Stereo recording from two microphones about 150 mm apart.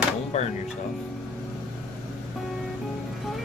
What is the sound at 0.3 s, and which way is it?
Speech, 50° left (ahead or behind).